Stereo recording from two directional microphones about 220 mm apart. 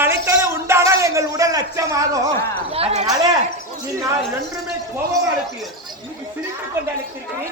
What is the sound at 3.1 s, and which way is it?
Speech, 15° right (ahead or behind).